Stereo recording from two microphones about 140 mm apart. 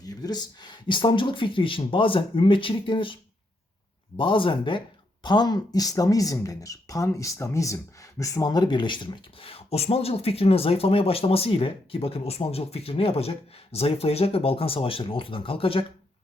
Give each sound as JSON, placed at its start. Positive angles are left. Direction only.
{"t": 0.0, "sound": "speech", "side_deg": 25}
{"t": 4.2, "sound": "speech", "side_deg": 35}